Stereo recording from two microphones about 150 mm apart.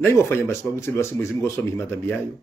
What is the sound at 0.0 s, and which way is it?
Speech, 15° left (ahead or behind).